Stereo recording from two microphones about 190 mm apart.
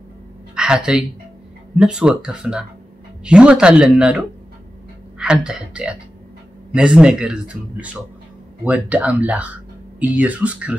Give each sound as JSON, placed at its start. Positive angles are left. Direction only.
{"t": 0.6, "sound": "a woman's voice", "side_deg": -5}
{"t": 5.2, "sound": "speech", "side_deg": -5}